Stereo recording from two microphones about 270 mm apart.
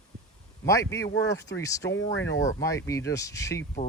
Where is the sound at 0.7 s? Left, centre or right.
Centre.